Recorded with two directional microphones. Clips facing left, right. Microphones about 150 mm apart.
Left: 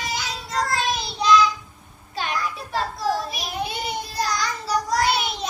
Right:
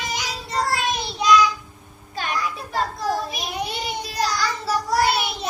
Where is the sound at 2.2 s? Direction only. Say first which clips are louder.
Even; 45° right (ahead or behind).